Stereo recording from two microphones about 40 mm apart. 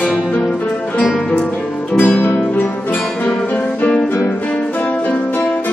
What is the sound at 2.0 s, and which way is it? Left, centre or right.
Music, left.